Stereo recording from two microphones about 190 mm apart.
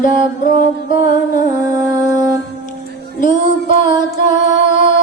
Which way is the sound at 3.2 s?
45° left (ahead or behind).